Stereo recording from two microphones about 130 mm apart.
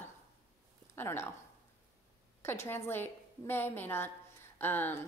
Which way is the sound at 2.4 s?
20° left (ahead or behind).